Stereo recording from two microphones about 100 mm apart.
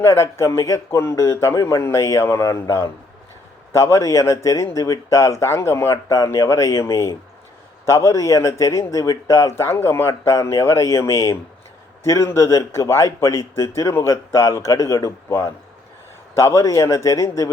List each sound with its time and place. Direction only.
0.0 s a man's voice: 25° left (ahead or behind)